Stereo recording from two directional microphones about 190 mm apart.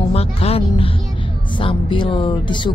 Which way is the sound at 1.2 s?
25° left (ahead or behind).